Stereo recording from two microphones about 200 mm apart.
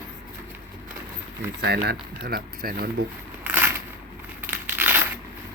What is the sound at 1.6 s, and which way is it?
Speech, 55° right (ahead or behind).